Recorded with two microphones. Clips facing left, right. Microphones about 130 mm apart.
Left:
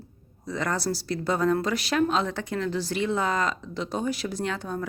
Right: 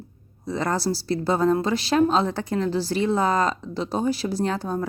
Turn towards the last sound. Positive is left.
turn(degrees=-35)  # may be behind; listen again after turning